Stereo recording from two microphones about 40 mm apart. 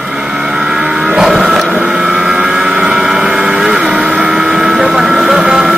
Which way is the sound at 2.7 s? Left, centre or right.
Right.